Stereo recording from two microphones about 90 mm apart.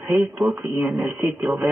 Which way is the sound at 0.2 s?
5° right (ahead or behind).